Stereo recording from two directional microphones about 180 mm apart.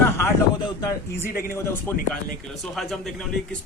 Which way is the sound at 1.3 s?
55° left (ahead or behind).